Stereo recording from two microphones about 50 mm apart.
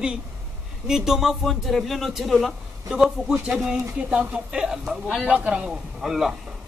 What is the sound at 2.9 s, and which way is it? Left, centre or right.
Speech, centre.